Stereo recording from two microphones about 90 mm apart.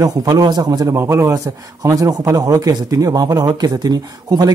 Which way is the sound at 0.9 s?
30° right (ahead or behind).